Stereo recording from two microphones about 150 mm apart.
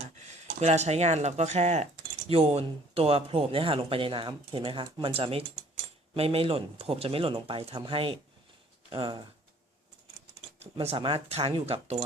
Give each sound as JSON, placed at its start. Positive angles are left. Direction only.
{"t": 0.6, "sound": "speech", "side_deg": -45}
{"t": 10.6, "sound": "speech", "side_deg": -40}